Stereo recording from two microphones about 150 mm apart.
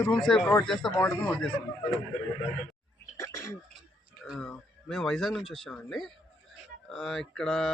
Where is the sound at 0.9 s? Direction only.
15° left (ahead or behind).